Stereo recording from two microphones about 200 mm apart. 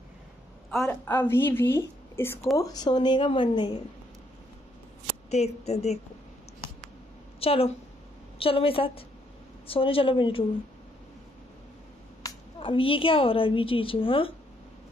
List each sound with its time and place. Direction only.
0.8 s a woman's voice: 10° left (ahead or behind)
5.3 s speech: 35° left (ahead or behind)
7.3 s a woman's voice: 30° left (ahead or behind)
12.2 s a woman's voice: 25° left (ahead or behind)